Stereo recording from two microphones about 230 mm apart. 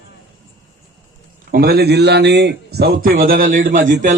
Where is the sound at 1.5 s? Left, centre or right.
Right.